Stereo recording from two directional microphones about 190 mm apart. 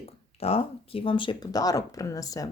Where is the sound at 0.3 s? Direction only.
30° left (ahead or behind).